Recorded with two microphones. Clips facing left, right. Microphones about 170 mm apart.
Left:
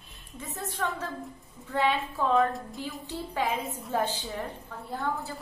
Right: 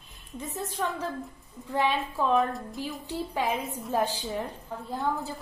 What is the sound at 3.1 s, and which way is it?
A woman's voice, 20° right (ahead or behind).